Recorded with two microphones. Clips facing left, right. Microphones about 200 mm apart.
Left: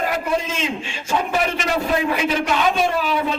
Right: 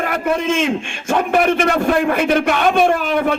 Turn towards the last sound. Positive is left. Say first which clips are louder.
# right 5 dB
turn(degrees=-50)  # may be behind; listen again after turning